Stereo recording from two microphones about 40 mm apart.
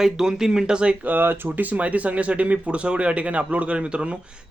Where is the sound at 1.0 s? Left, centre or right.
Right.